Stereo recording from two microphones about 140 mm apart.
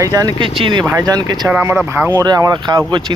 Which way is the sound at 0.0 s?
25° right (ahead or behind).